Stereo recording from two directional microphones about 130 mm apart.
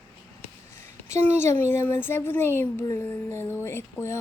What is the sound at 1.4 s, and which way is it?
Speech, 20° left (ahead or behind).